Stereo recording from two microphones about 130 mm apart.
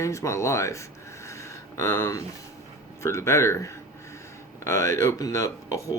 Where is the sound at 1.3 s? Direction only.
25° left (ahead or behind).